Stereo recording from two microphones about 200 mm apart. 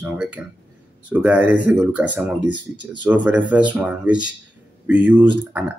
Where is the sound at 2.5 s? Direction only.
25° right (ahead or behind).